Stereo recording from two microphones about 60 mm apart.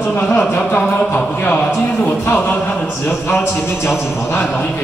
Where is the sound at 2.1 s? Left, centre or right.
Left.